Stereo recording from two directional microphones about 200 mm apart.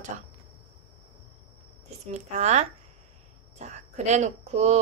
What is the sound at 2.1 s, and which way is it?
Speech, 35° right (ahead or behind).